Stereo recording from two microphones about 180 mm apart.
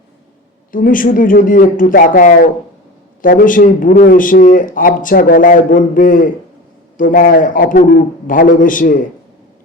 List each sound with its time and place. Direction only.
0.7 s a man's voice: 50° left (ahead or behind)